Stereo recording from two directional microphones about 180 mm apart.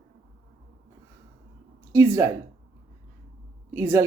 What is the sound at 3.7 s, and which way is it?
Speech, 15° right (ahead or behind).